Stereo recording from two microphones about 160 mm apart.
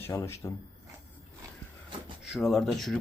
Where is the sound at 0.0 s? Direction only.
15° left (ahead or behind).